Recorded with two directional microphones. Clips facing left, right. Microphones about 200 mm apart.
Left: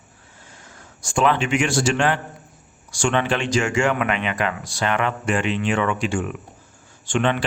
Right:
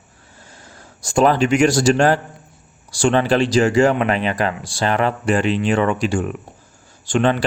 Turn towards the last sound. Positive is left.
turn(degrees=-40)  # may be behind; listen again after turning